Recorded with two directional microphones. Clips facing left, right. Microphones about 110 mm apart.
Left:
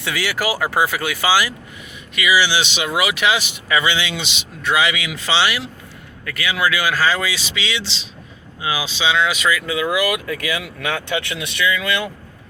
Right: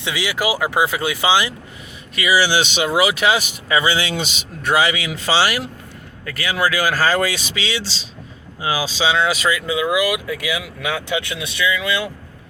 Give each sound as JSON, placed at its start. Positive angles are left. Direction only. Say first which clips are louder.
{"t": 0.0, "sound": "speech", "louder": "even", "side_deg": -15}
{"t": 2.1, "sound": "speech", "louder": "right 1 dB", "side_deg": -35}
{"t": 2.8, "sound": "speech", "louder": "right 3 dB", "side_deg": -30}